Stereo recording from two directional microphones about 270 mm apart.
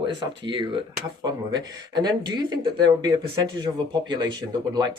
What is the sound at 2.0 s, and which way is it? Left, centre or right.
Speech, centre.